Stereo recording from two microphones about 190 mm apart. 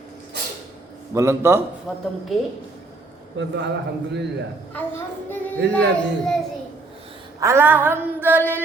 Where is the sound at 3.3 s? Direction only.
65° right (ahead or behind).